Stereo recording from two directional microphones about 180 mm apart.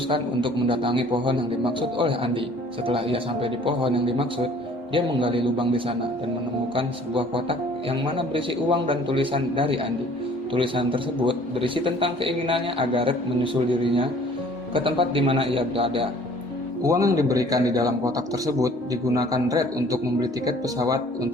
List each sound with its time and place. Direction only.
0.1 s a man's voice: 30° right (ahead or behind)
16.8 s a man's voice: 20° right (ahead or behind)